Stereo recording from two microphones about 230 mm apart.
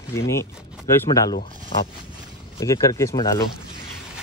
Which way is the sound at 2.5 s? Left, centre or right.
Centre.